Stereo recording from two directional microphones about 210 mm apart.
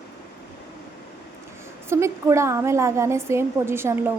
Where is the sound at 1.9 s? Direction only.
15° right (ahead or behind).